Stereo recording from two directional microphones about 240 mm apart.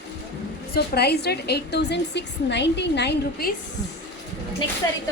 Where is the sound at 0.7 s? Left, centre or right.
Left.